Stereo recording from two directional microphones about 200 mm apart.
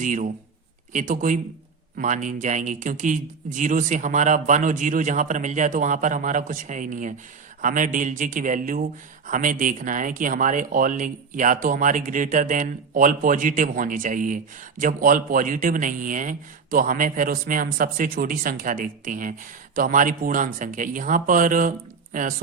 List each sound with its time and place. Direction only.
0.0 s speech: 40° right (ahead or behind)